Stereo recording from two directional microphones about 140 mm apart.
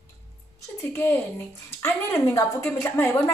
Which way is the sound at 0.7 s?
15° left (ahead or behind).